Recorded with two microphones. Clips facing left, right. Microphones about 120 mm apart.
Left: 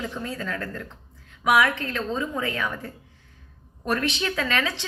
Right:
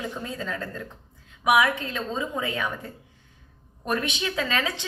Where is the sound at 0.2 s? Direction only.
20° right (ahead or behind).